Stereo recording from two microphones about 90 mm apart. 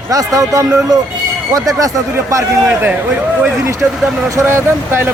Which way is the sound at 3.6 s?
35° right (ahead or behind).